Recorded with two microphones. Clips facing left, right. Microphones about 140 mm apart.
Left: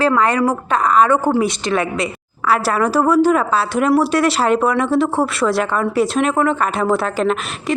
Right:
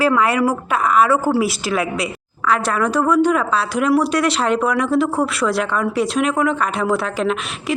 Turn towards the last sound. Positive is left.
turn(degrees=0)  # may be behind; listen again after turning